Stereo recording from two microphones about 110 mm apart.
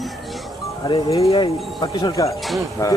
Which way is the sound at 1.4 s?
45° left (ahead or behind).